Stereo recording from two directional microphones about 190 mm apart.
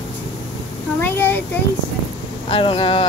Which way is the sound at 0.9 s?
10° left (ahead or behind).